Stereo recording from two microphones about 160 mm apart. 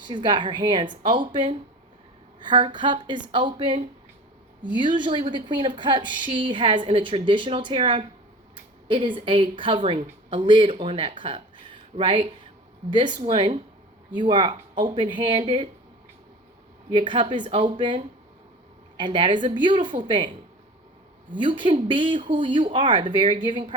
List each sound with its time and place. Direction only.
0.1 s a woman's voice: 30° right (ahead or behind)
16.9 s a woman's voice: 30° right (ahead or behind)
21.3 s a woman's voice: 30° right (ahead or behind)